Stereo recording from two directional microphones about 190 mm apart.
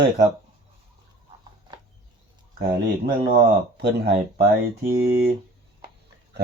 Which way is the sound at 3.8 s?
60° right (ahead or behind).